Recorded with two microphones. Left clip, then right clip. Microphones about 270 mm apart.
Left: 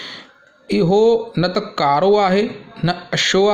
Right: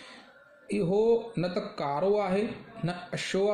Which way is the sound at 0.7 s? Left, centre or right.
Left.